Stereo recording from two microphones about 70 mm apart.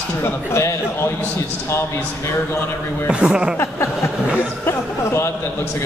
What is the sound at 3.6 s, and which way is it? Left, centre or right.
Speech, left.